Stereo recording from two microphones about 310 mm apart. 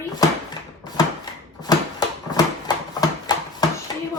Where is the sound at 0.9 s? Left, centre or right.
Centre.